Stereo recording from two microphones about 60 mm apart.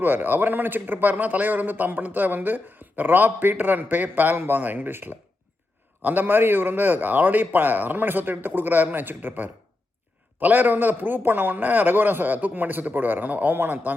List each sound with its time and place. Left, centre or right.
0.0 s a man's voice: right